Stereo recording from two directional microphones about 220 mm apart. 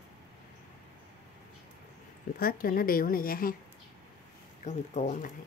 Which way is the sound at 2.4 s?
40° left (ahead or behind).